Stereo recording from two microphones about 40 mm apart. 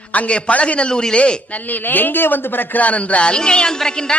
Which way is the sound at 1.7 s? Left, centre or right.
Left.